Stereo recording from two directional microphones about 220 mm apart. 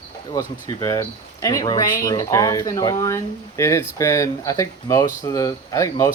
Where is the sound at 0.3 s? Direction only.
15° left (ahead or behind).